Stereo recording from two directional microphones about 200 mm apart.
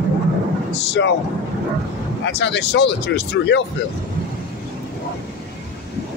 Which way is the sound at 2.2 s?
60° left (ahead or behind).